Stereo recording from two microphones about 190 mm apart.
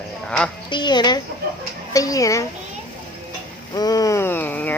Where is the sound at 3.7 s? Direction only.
20° left (ahead or behind).